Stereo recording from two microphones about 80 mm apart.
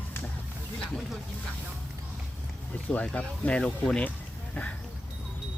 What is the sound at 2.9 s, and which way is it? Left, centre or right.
Speech, centre.